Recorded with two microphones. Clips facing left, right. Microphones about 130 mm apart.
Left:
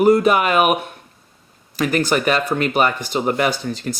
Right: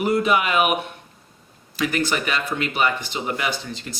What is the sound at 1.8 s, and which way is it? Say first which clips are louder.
Speech: left 5 dB; 45° left (ahead or behind).